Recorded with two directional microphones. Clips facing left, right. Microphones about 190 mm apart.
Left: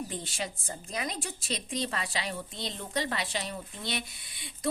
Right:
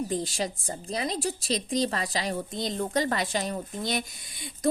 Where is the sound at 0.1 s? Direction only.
35° right (ahead or behind).